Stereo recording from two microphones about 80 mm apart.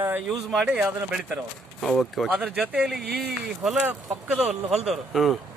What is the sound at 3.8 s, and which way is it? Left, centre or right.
Speech, centre.